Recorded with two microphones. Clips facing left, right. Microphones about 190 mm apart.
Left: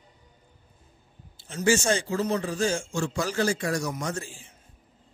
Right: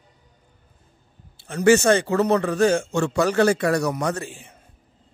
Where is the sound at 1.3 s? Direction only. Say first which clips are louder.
Right 8 dB; 60° right (ahead or behind).